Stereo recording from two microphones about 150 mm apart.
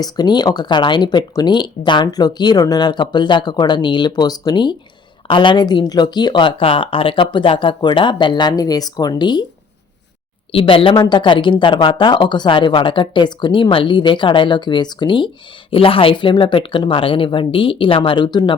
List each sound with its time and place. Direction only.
0.0 s speech: 30° left (ahead or behind)
10.5 s speech: 35° left (ahead or behind)